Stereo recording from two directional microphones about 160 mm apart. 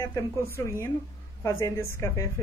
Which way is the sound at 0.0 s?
20° left (ahead or behind).